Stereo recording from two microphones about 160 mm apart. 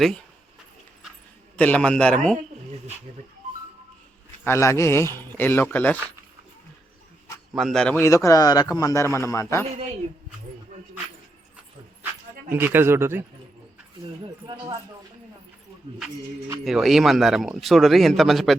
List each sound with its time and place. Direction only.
1.5 s a man's voice: 10° left (ahead or behind)
4.4 s a man's voice: 20° left (ahead or behind)
7.5 s speech: centre (ahead or behind)
7.9 s a man's voice: 20° left (ahead or behind)
12.5 s speech: 15° right (ahead or behind)
16.6 s speech: centre (ahead or behind)